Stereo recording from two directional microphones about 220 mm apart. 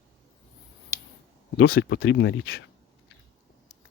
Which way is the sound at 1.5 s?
45° left (ahead or behind).